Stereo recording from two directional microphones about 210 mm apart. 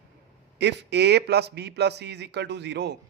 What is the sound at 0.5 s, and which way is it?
A man's voice, 55° right (ahead or behind).